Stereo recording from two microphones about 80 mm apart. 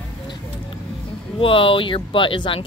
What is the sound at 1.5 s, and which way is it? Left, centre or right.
Speech, left.